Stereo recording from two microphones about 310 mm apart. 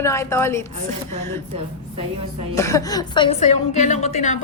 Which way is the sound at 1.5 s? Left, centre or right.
Centre.